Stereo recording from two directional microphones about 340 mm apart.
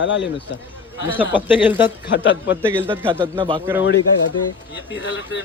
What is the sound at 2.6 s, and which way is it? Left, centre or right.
A man's voice, centre.